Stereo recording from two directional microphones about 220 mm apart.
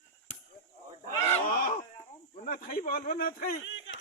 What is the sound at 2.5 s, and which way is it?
Speech, 40° left (ahead or behind).